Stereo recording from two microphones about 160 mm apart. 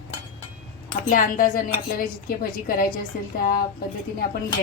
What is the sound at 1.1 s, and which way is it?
A woman's voice, 60° left (ahead or behind).